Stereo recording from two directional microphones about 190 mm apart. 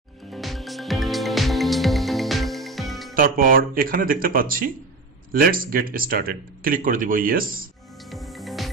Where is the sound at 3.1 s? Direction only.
50° right (ahead or behind).